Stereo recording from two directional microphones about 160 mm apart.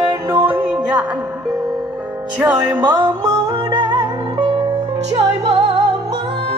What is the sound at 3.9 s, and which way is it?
Music, 30° right (ahead or behind).